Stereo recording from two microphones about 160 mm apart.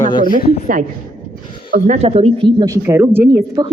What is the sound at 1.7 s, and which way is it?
Speech, 60° right (ahead or behind).